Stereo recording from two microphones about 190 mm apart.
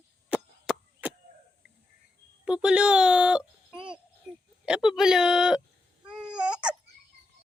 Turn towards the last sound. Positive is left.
turn(degrees=-5)  # may be behind; listen again after turning